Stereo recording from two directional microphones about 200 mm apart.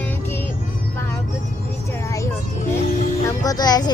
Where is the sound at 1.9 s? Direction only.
15° left (ahead or behind).